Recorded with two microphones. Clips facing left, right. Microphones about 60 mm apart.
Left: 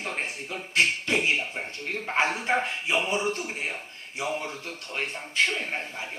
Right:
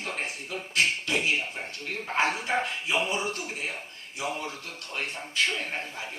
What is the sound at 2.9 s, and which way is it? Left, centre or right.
Speech, left.